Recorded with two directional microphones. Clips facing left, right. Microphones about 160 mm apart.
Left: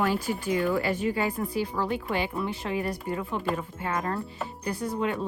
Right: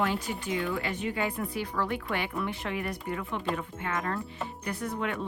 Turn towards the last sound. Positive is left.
turn(degrees=35)  # may be behind; listen again after turning